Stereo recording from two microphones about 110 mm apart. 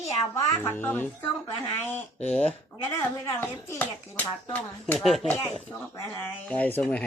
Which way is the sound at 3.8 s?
15° left (ahead or behind).